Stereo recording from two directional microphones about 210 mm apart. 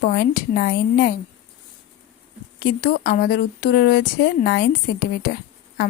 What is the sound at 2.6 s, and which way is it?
Speech, 45° left (ahead or behind).